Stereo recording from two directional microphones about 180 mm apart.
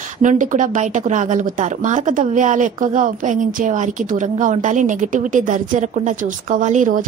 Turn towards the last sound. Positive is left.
turn(degrees=-45)  # may be behind; listen again after turning